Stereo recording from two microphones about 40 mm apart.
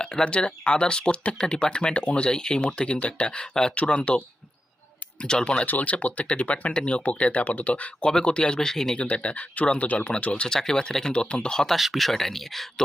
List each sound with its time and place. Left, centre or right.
0.0 s speech: left
5.2 s speech: left
5.6 s speech: left
8.0 s speech: left
9.0 s speech: left
10.4 s speech: centre
11.1 s speech: left
11.3 s speech: centre
11.8 s speech: centre